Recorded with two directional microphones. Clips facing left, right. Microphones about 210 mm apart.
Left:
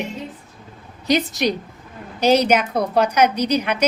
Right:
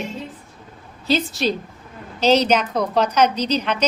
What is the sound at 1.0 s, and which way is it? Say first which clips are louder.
A woman's voice: left 1 dB; 15° left (ahead or behind).